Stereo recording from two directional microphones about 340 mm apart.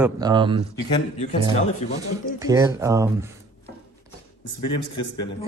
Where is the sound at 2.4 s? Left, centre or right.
Centre.